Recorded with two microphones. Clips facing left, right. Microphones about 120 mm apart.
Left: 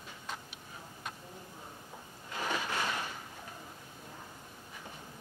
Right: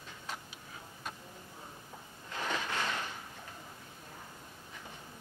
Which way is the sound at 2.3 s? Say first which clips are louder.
Left 1 dB; 10° left (ahead or behind).